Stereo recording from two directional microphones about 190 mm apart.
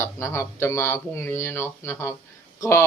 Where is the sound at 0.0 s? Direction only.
15° left (ahead or behind).